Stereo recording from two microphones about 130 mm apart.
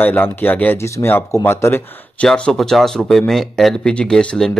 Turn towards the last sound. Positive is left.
turn(degrees=5)  # may be behind; listen again after turning